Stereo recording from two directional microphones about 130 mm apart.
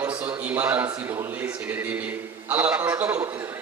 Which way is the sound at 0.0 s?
15° right (ahead or behind).